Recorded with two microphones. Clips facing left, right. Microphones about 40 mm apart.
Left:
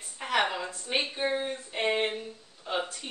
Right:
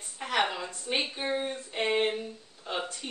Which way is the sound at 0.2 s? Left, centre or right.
Centre.